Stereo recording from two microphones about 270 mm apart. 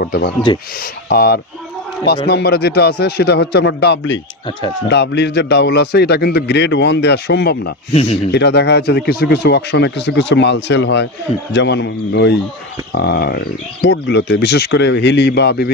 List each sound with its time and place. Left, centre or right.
0.0 s speech: left
7.9 s speech: left
8.3 s speech: left